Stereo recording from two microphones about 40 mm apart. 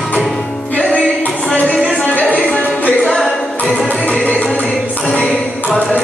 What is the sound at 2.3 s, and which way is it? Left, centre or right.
Music, left.